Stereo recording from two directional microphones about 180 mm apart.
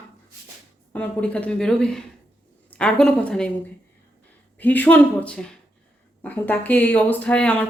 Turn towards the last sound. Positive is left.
turn(degrees=5)  # may be behind; listen again after turning